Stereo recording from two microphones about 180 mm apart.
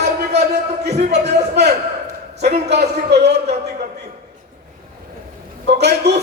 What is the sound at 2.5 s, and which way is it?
Speech, 65° right (ahead or behind).